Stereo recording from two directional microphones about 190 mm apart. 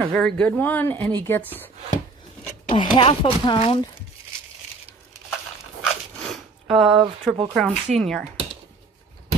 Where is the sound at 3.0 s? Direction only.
30° left (ahead or behind).